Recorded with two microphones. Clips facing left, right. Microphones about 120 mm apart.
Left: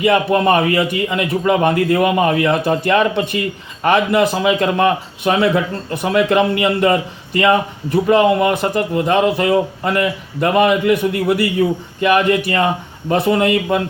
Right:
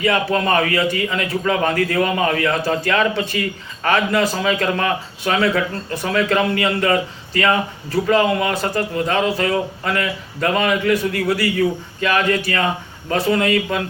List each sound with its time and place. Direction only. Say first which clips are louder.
0.0 s a man's voice: left 5 dB; 20° left (ahead or behind)